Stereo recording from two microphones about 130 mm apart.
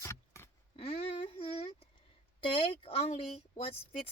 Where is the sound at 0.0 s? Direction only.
20° left (ahead or behind).